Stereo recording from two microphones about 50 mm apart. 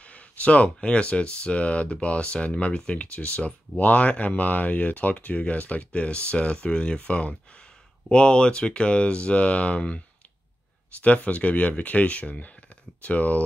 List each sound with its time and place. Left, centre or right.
0.0 s speech: left